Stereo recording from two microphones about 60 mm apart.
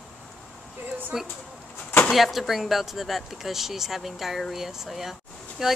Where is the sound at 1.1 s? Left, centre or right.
Centre.